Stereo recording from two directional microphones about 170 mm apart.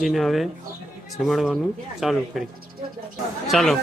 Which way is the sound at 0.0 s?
Centre (ahead or behind).